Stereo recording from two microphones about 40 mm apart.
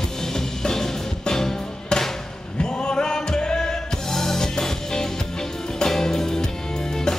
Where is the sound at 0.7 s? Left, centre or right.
Centre.